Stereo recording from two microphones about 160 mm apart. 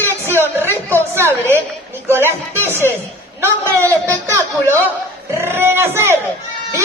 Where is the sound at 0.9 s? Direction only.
15° right (ahead or behind).